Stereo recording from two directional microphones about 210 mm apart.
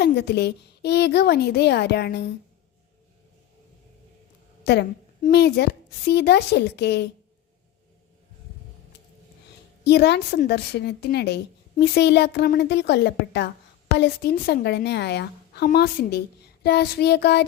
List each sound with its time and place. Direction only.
0.0 s a woman's voice: 50° left (ahead or behind)
4.6 s a woman's voice: 50° left (ahead or behind)
9.8 s a woman's voice: 50° left (ahead or behind)